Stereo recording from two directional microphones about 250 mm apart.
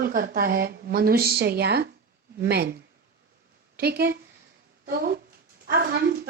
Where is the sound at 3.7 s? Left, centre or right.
Right.